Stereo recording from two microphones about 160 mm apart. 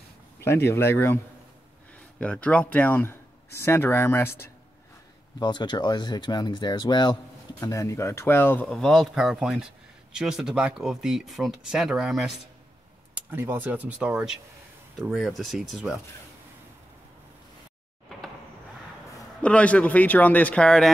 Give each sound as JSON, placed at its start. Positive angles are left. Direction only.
{"t": 0.4, "sound": "speech", "side_deg": 15}
{"t": 5.4, "sound": "speech", "side_deg": 30}
{"t": 13.1, "sound": "speech", "side_deg": -15}
{"t": 19.4, "sound": "speech", "side_deg": 10}